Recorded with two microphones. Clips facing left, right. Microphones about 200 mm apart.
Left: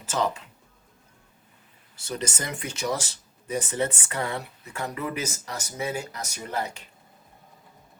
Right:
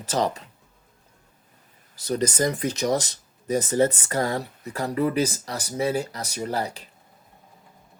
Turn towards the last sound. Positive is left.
turn(degrees=-35)  # may be behind; listen again after turning